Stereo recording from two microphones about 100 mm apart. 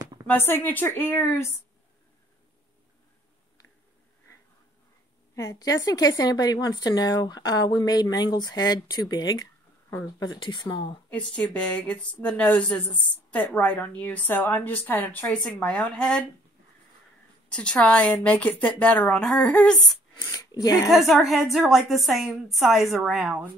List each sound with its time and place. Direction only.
0.5 s speech: 20° left (ahead or behind)
5.3 s a woman's voice: 35° left (ahead or behind)
9.8 s speech: 30° left (ahead or behind)
10.2 s speech: 50° left (ahead or behind)
11.1 s speech: 10° left (ahead or behind)
15.2 s speech: 5° left (ahead or behind)
17.6 s speech: 10° left (ahead or behind)
20.2 s speech: 40° left (ahead or behind)
20.8 s a woman's voice: centre (ahead or behind)